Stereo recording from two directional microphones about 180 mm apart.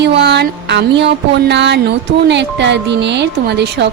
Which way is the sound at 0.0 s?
70° right (ahead or behind).